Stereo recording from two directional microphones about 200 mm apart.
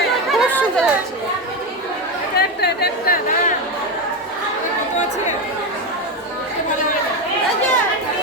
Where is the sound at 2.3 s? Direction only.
50° left (ahead or behind).